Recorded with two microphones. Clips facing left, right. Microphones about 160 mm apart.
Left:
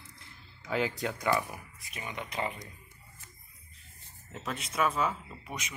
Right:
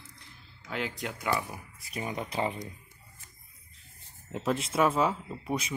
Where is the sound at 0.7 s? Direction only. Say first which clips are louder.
Left 4 dB; centre (ahead or behind).